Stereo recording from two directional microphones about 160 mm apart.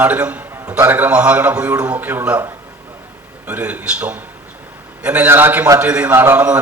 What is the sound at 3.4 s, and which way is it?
A man's voice, 10° right (ahead or behind).